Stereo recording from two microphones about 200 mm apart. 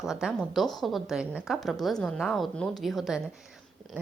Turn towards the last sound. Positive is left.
turn(degrees=0)  # may be behind; listen again after turning